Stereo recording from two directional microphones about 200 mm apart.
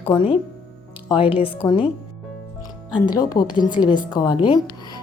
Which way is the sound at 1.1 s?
25° left (ahead or behind).